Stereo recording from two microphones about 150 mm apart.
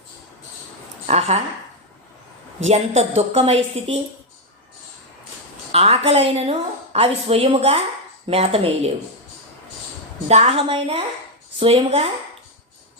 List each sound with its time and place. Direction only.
1.0 s speech: 45° right (ahead or behind)
2.6 s a woman's voice: 45° right (ahead or behind)
5.7 s a woman's voice: 45° right (ahead or behind)
10.2 s a woman's voice: 40° right (ahead or behind)